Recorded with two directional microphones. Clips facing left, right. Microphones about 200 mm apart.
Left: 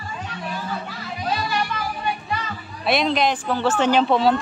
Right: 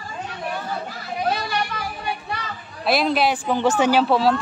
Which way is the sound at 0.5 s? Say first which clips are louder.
Right 1 dB; 60° right (ahead or behind).